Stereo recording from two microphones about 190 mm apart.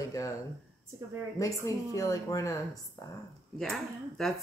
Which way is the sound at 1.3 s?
15° left (ahead or behind).